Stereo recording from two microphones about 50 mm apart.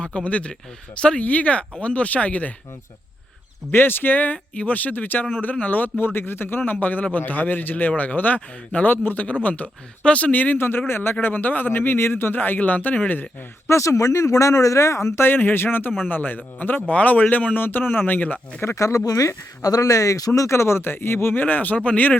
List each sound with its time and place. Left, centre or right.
0.0 s a man's voice: left
3.7 s a man's voice: left
6.1 s a man's voice: left
10.6 s a man's voice: left
13.7 s speech: left
15.2 s a man's voice: left
18.6 s speech: left
21.3 s a man's voice: left